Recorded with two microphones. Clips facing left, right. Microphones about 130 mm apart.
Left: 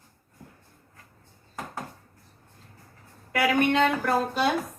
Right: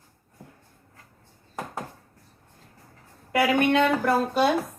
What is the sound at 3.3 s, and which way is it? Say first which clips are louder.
A woman's voice: right 2 dB; 55° right (ahead or behind).